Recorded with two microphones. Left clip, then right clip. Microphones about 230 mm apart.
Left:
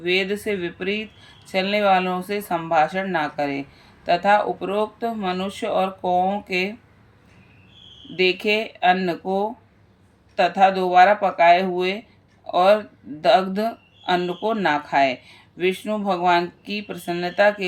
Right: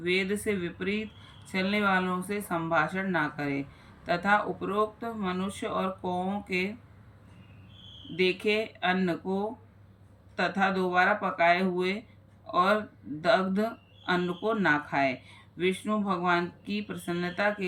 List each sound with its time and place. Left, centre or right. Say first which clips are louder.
0.0 s speech: left 7 dB; centre
8.1 s speech: left 7 dB; centre
10.3 s speech: left 10 dB; centre